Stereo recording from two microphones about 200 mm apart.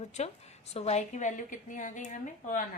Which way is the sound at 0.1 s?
35° left (ahead or behind).